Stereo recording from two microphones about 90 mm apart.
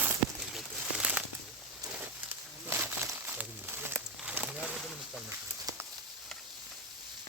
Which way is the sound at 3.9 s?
10° right (ahead or behind).